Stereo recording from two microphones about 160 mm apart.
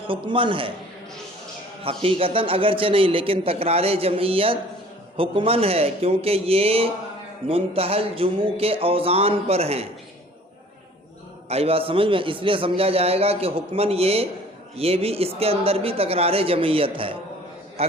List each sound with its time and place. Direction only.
0.1 s a man's voice: 30° right (ahead or behind)
1.8 s a man's voice: 35° right (ahead or behind)
11.4 s a man's voice: 40° right (ahead or behind)